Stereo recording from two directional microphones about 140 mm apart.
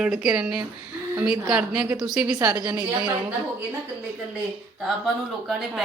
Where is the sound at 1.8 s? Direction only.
30° right (ahead or behind).